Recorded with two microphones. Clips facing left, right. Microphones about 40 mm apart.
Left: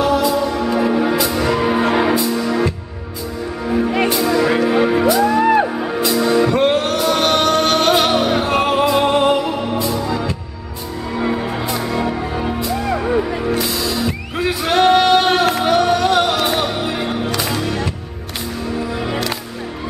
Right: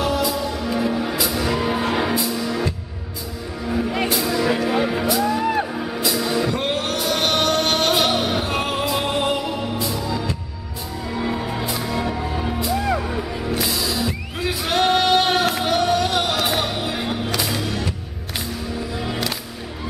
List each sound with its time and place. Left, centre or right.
0.0 s music: centre
2.1 s music: centre
12.5 s music: centre
13.0 s music: centre
13.6 s music: centre
14.5 s singing: centre
17.3 s music: centre